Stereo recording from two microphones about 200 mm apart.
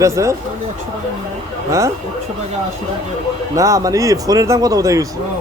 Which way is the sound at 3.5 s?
15° right (ahead or behind).